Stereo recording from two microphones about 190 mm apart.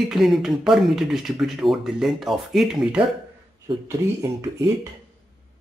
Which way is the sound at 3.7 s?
15° right (ahead or behind).